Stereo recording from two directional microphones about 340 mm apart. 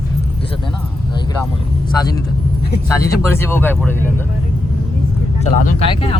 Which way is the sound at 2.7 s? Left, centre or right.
Left.